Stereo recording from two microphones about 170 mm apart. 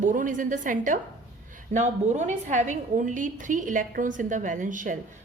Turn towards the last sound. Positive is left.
turn(degrees=-50)  # may be behind; listen again after turning